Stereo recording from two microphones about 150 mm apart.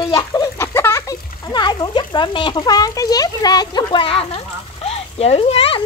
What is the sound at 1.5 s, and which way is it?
A child's voice, 30° left (ahead or behind).